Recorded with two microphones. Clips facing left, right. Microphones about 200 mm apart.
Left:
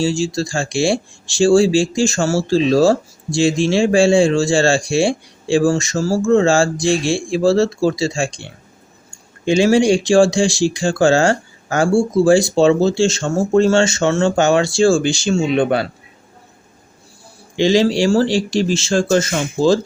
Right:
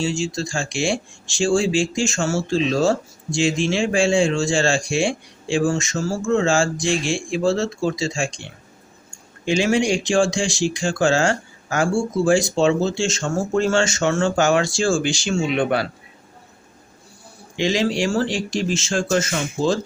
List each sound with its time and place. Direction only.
0.0 s speech: 35° left (ahead or behind)
9.6 s a man's voice: 30° left (ahead or behind)
17.6 s speech: 30° left (ahead or behind)